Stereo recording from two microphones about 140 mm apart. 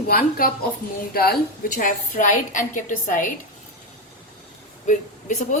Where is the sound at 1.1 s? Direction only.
80° left.